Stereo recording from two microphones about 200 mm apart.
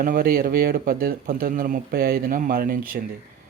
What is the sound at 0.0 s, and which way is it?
Speech, 45° right (ahead or behind).